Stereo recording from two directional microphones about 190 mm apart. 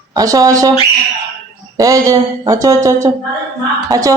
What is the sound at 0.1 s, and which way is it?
Speech, 20° right (ahead or behind).